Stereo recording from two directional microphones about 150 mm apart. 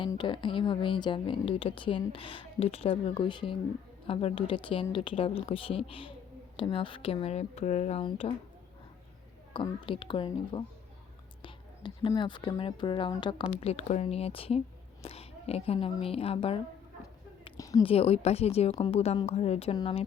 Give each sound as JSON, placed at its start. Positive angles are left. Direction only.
{"t": 0.2, "sound": "speech", "side_deg": 35}
{"t": 9.8, "sound": "a woman's voice", "side_deg": 35}
{"t": 17.6, "sound": "a woman's voice", "side_deg": 25}
{"t": 17.8, "sound": "speech", "side_deg": 40}